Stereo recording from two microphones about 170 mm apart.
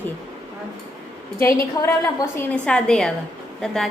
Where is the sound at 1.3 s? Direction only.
15° left (ahead or behind).